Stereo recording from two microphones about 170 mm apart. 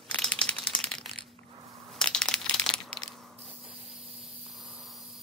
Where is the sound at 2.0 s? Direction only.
5° left (ahead or behind).